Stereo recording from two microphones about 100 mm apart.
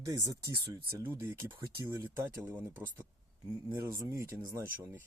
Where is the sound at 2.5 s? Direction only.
15° right (ahead or behind).